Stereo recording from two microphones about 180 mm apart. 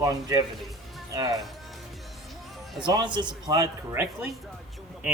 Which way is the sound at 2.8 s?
25° right (ahead or behind).